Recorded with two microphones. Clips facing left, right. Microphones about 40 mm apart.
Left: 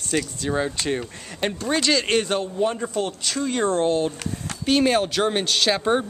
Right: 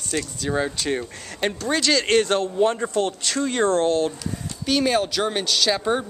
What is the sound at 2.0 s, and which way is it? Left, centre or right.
Speech, centre.